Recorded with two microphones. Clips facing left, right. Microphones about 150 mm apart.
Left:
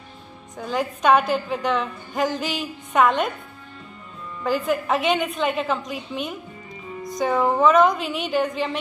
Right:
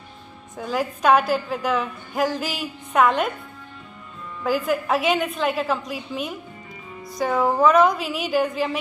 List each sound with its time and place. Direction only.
0.6 s a woman's voice: centre (ahead or behind)
4.4 s a woman's voice: 5° right (ahead or behind)